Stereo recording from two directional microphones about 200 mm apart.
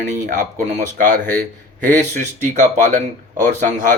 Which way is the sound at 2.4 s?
40° right (ahead or behind).